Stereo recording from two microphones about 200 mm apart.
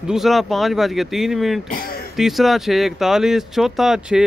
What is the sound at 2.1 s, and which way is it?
Speech, centre (ahead or behind).